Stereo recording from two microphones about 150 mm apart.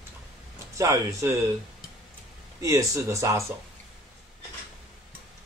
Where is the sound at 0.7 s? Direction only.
20° right (ahead or behind).